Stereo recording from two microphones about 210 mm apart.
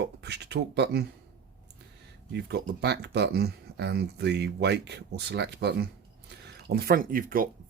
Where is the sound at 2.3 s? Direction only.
50° right (ahead or behind).